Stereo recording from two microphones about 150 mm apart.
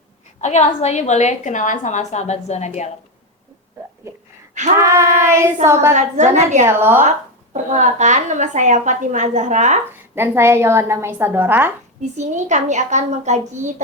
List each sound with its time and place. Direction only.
0.4 s a woman's voice: 50° left (ahead or behind)
4.8 s child singing: 20° right (ahead or behind)
5.6 s a woman's voice: 20° right (ahead or behind)
5.9 s a woman's voice: 50° right (ahead or behind)
6.7 s a woman's voice: 15° right (ahead or behind)
7.5 s a woman's voice: 50° right (ahead or behind)
10.2 s a woman's voice: 15° right (ahead or behind)
12.1 s a woman's voice: 50° right (ahead or behind)